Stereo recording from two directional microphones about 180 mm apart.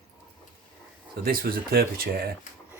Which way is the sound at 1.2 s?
55° right (ahead or behind).